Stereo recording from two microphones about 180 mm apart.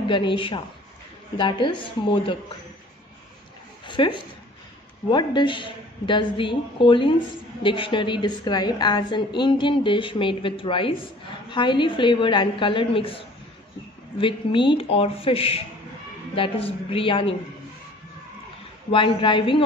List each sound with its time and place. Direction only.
0.1 s a woman's voice: 30° left (ahead or behind)
3.8 s a woman's voice: 25° left (ahead or behind)
14.2 s a woman's voice: 30° left (ahead or behind)
18.9 s a woman's voice: 30° left (ahead or behind)